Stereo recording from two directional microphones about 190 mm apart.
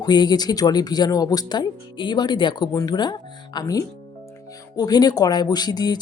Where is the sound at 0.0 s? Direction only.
20° left (ahead or behind).